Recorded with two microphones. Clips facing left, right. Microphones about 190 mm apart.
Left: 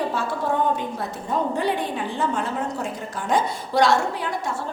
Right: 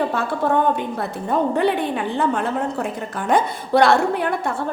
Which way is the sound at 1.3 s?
60° right (ahead or behind).